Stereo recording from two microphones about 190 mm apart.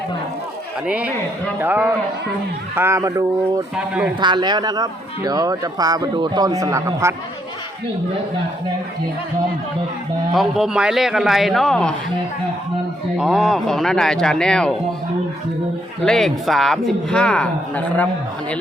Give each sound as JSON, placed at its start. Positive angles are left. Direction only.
{"t": 0.9, "sound": "speech", "side_deg": -5}
{"t": 3.8, "sound": "speech", "side_deg": -5}
{"t": 4.2, "sound": "speech", "side_deg": -25}
{"t": 10.3, "sound": "speech", "side_deg": 0}
{"t": 13.1, "sound": "speech", "side_deg": 0}
{"t": 16.0, "sound": "speech", "side_deg": 0}